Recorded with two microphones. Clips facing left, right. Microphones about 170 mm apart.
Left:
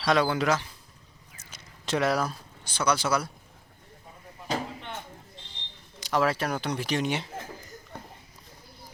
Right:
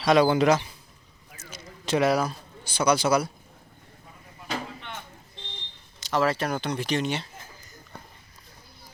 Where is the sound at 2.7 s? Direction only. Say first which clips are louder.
Right 4 dB; 15° right (ahead or behind).